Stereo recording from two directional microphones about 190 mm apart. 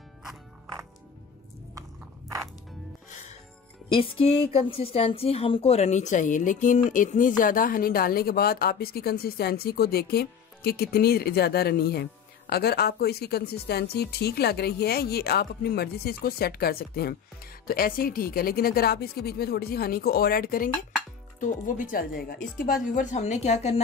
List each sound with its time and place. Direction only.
1.8 s biting: 15° right (ahead or behind)
4.0 s a woman's voice: 30° left (ahead or behind)